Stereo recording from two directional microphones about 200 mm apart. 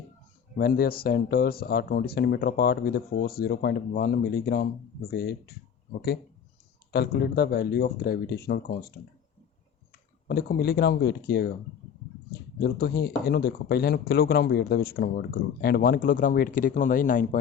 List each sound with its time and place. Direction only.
0.5 s speech: 50° left (ahead or behind)
6.9 s speech: 55° left (ahead or behind)
10.2 s speech: 50° left (ahead or behind)
12.5 s speech: 50° left (ahead or behind)